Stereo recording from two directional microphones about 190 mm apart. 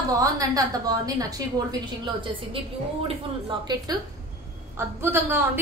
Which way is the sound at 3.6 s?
25° right (ahead or behind).